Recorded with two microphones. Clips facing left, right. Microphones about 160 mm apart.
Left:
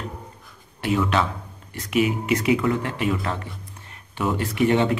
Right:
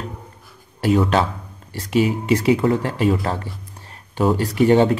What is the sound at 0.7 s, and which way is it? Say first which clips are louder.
Speech: right 5 dB; 35° right (ahead or behind).